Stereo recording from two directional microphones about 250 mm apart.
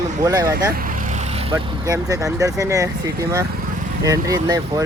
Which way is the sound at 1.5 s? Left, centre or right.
Centre.